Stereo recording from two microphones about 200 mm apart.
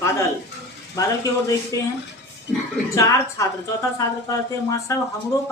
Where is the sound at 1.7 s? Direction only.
15° left (ahead or behind).